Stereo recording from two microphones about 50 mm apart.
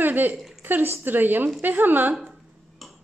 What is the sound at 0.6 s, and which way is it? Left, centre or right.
A woman's voice, right.